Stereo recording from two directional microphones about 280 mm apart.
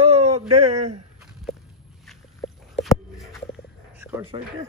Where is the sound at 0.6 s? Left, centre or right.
Right.